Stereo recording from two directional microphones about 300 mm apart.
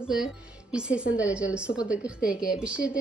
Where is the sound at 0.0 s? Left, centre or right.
Centre.